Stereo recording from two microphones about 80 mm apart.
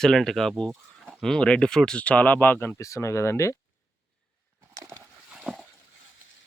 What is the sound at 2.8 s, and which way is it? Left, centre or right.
Speech, left.